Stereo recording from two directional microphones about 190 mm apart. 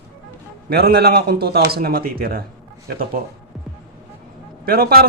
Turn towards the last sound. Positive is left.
turn(degrees=-55)  # may be behind; listen again after turning